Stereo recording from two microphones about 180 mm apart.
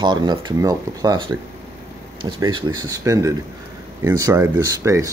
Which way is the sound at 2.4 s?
25° right (ahead or behind).